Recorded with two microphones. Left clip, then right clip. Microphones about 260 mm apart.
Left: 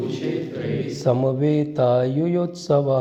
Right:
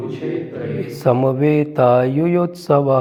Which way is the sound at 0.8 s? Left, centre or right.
Right.